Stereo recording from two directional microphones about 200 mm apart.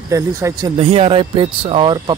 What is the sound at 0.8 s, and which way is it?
Speech, 30° right (ahead or behind).